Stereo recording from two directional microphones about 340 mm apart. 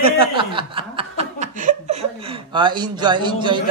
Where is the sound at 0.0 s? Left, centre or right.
Centre.